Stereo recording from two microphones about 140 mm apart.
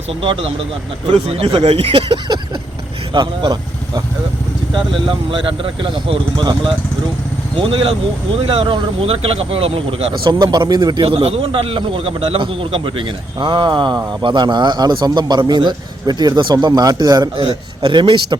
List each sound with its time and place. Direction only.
0.2 s speech: 40° right (ahead or behind)